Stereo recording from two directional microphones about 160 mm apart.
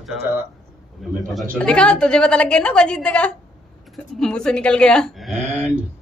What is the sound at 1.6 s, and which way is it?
A woman's voice, 5° left (ahead or behind).